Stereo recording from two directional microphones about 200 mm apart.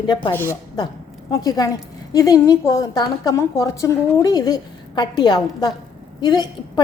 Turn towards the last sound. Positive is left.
turn(degrees=20)  # may be behind; listen again after turning